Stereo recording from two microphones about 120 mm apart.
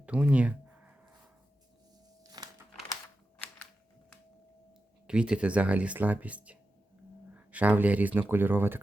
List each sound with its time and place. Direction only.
0.0 s a sound: 10° right (ahead or behind)
2.4 s crumpling: 35° right (ahead or behind)
5.0 s speech: 10° right (ahead or behind)